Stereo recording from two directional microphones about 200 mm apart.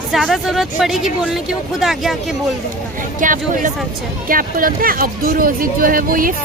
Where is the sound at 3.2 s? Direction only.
40° right (ahead or behind).